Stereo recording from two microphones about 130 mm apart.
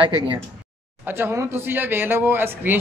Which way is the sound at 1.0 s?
20° right (ahead or behind).